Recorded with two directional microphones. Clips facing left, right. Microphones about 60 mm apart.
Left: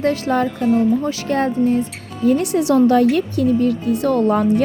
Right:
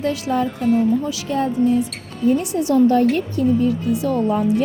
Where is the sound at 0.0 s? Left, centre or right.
Left.